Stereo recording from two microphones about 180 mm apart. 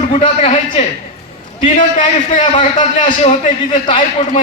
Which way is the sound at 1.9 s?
30° left (ahead or behind).